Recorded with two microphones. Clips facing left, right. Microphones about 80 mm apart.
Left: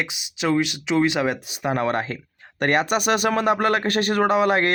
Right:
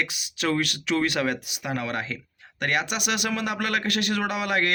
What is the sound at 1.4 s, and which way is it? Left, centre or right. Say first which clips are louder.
Speech: left 7 dB; left.